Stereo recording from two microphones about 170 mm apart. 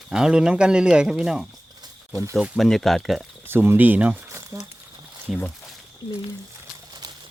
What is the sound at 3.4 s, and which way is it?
Speech, 15° right (ahead or behind).